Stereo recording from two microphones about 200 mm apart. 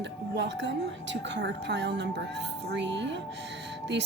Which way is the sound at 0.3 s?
60° right (ahead or behind).